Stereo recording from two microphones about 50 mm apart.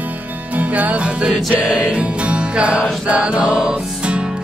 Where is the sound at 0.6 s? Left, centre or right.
Right.